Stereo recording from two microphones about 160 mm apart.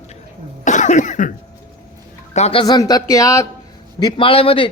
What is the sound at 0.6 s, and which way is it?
Cough, 50° left (ahead or behind).